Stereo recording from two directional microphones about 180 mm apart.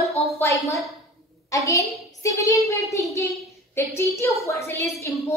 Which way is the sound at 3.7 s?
15° left (ahead or behind).